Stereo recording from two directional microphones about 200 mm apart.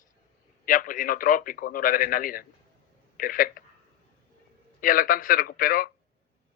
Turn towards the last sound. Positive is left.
turn(degrees=45)  # may be behind; listen again after turning